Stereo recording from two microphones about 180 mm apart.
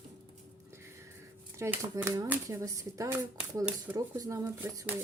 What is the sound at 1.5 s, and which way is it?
Speech, 15° right (ahead or behind).